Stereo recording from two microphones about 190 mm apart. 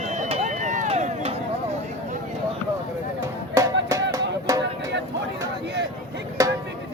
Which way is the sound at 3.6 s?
15° right (ahead or behind).